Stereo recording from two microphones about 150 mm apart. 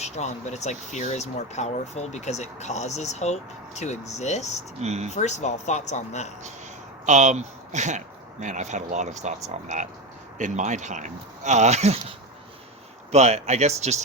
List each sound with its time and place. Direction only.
0.0 s speech: 50° left (ahead or behind)
4.8 s speech: 45° right (ahead or behind)
5.1 s speech: 50° left (ahead or behind)
7.0 s speech: 50° right (ahead or behind)